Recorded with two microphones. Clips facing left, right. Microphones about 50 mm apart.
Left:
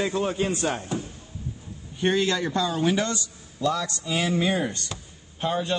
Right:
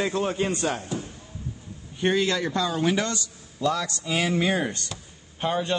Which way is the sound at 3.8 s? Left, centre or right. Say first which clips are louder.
Right 1 dB; right.